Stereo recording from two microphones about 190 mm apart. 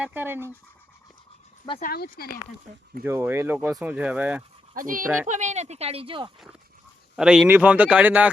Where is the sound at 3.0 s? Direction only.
10° right (ahead or behind).